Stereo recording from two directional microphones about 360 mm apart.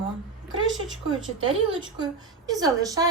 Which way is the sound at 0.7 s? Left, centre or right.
Centre.